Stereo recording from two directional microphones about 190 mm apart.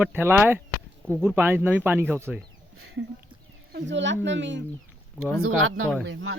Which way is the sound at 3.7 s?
65° right (ahead or behind).